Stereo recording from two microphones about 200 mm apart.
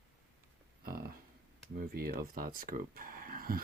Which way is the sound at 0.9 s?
50° right (ahead or behind).